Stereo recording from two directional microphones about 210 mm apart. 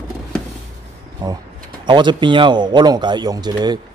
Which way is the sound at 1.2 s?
20° right (ahead or behind).